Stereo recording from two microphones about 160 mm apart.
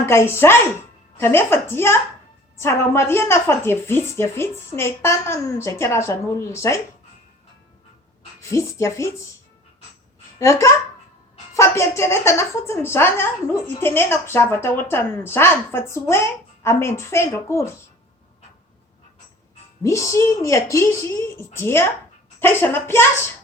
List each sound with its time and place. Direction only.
0.0 s a woman's voice: 15° left (ahead or behind)
8.4 s a woman's voice: 20° left (ahead or behind)
10.3 s a child's voice: 20° left (ahead or behind)
19.8 s a woman's voice: 20° left (ahead or behind)